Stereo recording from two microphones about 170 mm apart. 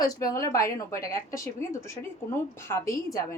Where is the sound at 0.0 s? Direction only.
20° left (ahead or behind).